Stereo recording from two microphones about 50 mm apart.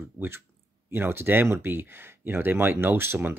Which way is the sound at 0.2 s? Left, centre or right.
Right.